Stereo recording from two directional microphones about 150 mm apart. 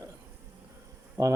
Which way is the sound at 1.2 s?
25° right (ahead or behind).